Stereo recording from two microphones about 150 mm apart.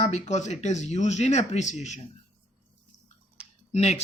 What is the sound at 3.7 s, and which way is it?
Speech, 45° left (ahead or behind).